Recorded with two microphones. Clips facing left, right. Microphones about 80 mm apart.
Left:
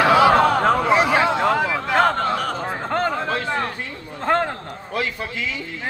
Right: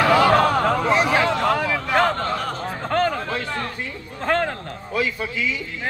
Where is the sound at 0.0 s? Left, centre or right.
Centre.